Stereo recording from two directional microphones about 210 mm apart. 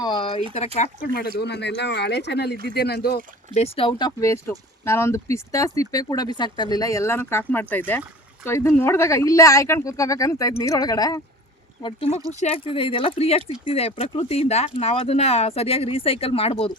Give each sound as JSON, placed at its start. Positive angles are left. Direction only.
{"t": 0.0, "sound": "a sound", "side_deg": 20}
{"t": 0.8, "sound": "speech", "side_deg": 40}
{"t": 1.4, "sound": "speech", "side_deg": 55}
{"t": 3.5, "sound": "speech", "side_deg": 30}